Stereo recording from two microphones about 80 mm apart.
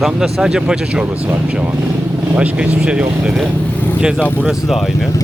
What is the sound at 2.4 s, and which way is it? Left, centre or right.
Speech, centre.